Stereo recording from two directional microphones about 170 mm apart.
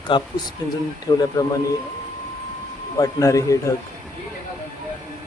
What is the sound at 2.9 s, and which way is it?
Speech, 20° left (ahead or behind).